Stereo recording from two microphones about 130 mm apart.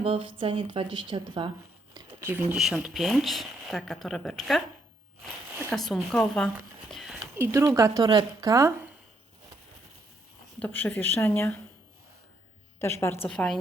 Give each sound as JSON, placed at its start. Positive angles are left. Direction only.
{"t": 0.0, "sound": "speech", "side_deg": -45}
{"t": 2.2, "sound": "speech", "side_deg": -15}
{"t": 2.6, "sound": "speech", "side_deg": -5}
{"t": 5.7, "sound": "speech", "side_deg": 0}
{"t": 6.9, "sound": "a sound", "side_deg": 0}
{"t": 7.3, "sound": "speech", "side_deg": -20}
{"t": 10.6, "sound": "a woman's voice", "side_deg": 10}
{"t": 12.8, "sound": "a woman's voice", "side_deg": 20}
{"t": 13.2, "sound": "speech", "side_deg": 5}